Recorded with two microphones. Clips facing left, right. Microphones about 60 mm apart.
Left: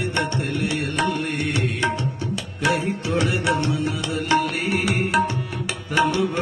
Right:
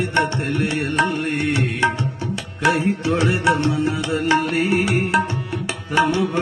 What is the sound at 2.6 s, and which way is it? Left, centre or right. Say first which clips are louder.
Music: right 4 dB; right.